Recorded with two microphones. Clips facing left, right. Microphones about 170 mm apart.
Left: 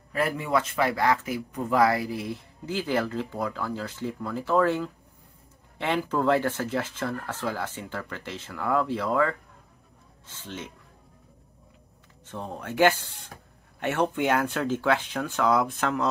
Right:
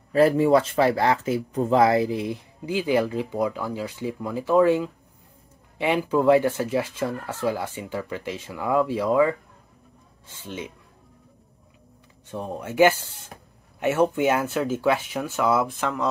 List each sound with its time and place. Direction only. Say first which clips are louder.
0.1 s speech: right 9 dB; 30° right (ahead or behind); by 10.7 s 10° right (ahead or behind)
12.3 s speech: right 4 dB; 15° right (ahead or behind)